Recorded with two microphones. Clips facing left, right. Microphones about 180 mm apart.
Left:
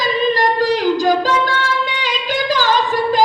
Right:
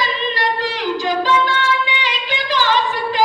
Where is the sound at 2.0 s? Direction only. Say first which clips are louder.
Left 4 dB; 45° left (ahead or behind).